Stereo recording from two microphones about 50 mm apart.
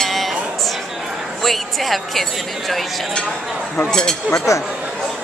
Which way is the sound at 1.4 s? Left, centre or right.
Centre.